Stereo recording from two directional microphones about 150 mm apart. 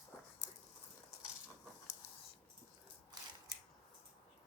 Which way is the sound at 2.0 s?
20° left (ahead or behind).